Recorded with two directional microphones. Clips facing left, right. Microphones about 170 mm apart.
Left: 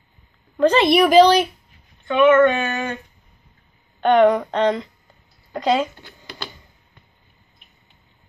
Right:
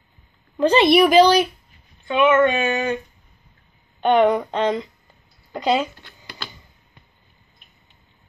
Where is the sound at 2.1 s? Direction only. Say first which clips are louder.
Left 3 dB; 15° right (ahead or behind).